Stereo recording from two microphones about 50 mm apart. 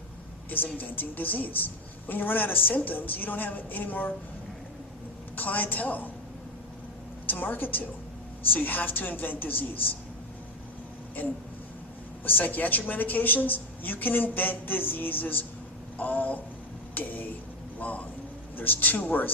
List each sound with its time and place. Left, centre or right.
0.5 s a woman's voice: left
5.4 s a woman's voice: left
7.3 s a woman's voice: left
12.2 s a woman's voice: left